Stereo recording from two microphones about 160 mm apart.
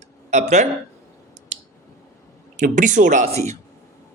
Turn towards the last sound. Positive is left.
turn(degrees=-55)  # may be behind; listen again after turning